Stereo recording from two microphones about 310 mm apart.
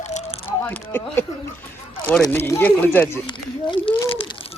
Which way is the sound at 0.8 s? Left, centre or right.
Centre.